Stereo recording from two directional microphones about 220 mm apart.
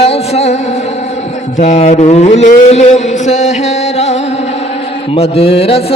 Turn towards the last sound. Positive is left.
turn(degrees=25)  # may be behind; listen again after turning